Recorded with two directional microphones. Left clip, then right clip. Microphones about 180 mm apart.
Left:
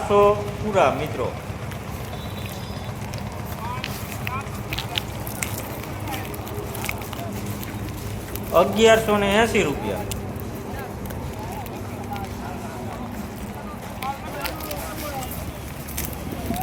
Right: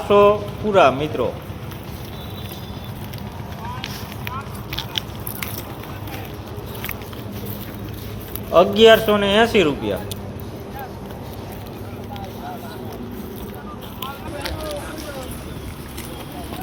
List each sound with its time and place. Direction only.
0.1 s a man's voice: 25° right (ahead or behind)
8.5 s a man's voice: 20° right (ahead or behind)